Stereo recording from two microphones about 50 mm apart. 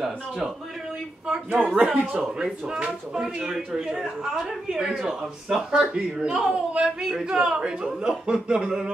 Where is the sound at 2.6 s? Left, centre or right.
Right.